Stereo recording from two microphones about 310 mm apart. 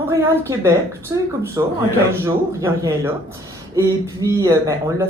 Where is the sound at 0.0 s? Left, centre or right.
Centre.